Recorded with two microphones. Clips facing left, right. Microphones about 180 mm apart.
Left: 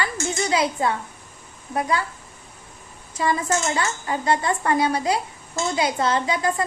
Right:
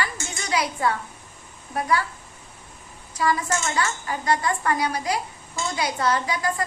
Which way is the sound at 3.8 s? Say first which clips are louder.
Left 1 dB; 25° left (ahead or behind).